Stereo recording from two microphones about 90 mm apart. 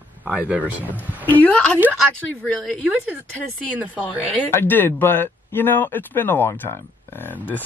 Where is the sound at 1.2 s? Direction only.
20° left (ahead or behind).